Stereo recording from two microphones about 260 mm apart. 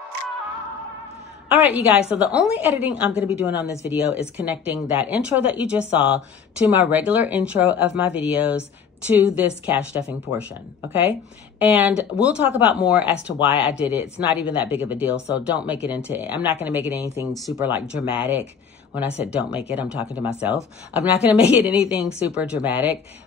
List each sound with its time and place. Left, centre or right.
1.5 s speech: centre